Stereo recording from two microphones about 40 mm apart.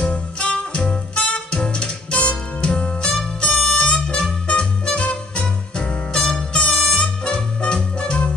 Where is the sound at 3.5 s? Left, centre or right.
Centre.